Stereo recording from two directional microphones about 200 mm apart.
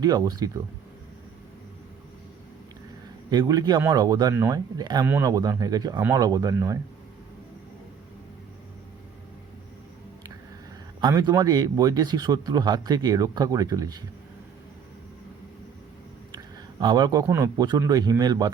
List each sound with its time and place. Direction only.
0.0 s speech: 20° right (ahead or behind)
3.2 s speech: 20° right (ahead or behind)
11.0 s speech: 20° right (ahead or behind)
16.8 s speech: 20° right (ahead or behind)